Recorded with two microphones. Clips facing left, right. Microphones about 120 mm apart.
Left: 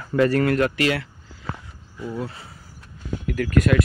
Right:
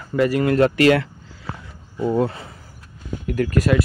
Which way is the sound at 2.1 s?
60° right (ahead or behind).